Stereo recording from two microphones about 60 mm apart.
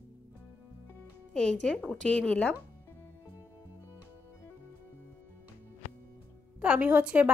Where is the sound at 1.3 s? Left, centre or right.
Centre.